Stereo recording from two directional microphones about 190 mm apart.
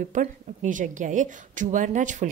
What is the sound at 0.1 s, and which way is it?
A woman's voice, 40° right (ahead or behind).